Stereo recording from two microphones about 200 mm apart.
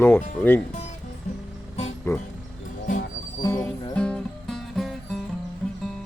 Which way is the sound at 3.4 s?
15° left (ahead or behind).